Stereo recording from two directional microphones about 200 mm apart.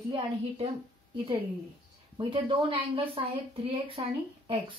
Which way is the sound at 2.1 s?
25° right (ahead or behind).